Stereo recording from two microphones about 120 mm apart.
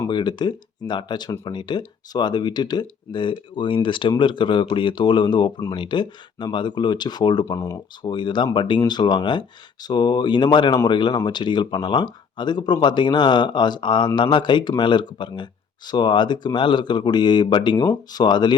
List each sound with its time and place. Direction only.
0.1 s speech: 40° left (ahead or behind)
7.5 s speech: 25° left (ahead or behind)
8.0 s speech: 40° left (ahead or behind)